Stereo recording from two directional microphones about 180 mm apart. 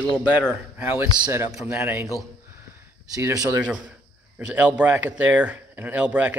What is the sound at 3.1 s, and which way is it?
Speech, 20° right (ahead or behind).